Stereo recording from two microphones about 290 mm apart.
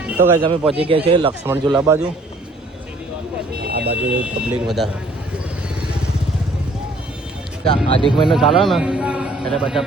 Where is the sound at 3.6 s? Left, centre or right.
Right.